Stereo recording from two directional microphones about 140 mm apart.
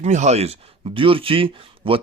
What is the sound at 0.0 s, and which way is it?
Speech, 55° right (ahead or behind).